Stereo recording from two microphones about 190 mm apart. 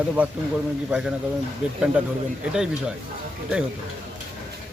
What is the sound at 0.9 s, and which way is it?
Speech, 5° right (ahead or behind).